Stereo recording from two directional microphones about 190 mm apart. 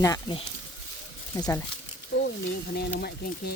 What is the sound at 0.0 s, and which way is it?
Speech, 20° left (ahead or behind).